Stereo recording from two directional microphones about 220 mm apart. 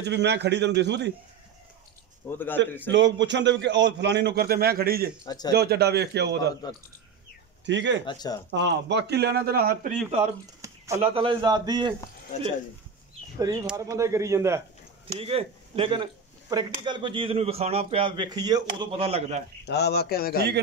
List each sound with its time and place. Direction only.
0.0 s a man's voice: 50° right (ahead or behind)
2.2 s speech: 10° left (ahead or behind)
2.9 s a man's voice: 55° right (ahead or behind)
5.2 s speech: 20° left (ahead or behind)
5.5 s a man's voice: 45° right (ahead or behind)
7.6 s speech: 55° right (ahead or behind)
8.0 s speech: 20° left (ahead or behind)
8.5 s a man's voice: 50° right (ahead or behind)
10.6 s bird: 15° right (ahead or behind)
11.0 s speech: 25° right (ahead or behind)
13.4 s speech: 15° right (ahead or behind)
15.1 s speech: 25° right (ahead or behind)
19.6 s speech: 50° left (ahead or behind)